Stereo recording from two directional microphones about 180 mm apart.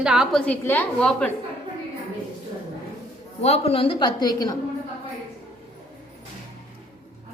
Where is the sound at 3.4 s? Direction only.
35° left (ahead or behind).